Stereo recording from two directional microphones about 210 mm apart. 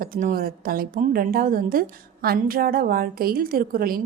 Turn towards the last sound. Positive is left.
turn(degrees=-45)  # may be behind; listen again after turning